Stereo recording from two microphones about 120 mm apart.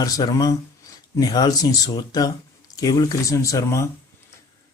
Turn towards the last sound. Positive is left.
turn(degrees=25)  # may be behind; listen again after turning